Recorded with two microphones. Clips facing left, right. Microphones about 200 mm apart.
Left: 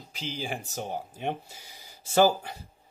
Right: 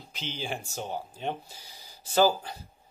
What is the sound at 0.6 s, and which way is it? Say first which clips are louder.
Speech: left 1 dB; 40° left (ahead or behind).